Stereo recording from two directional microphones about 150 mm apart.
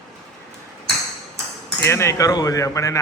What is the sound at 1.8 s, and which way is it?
Cutlery, 15° left (ahead or behind).